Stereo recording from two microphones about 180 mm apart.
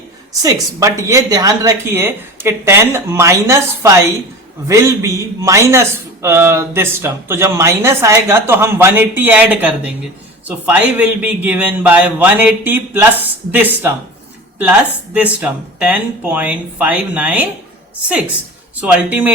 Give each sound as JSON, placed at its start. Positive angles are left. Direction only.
{"t": 0.4, "sound": "a man's voice", "side_deg": -15}
{"t": 18.8, "sound": "a man's voice", "side_deg": -10}